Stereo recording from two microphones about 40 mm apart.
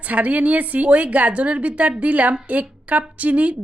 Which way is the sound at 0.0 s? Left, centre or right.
Right.